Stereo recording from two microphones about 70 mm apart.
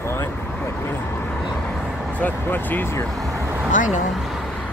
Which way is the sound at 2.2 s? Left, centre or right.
Left.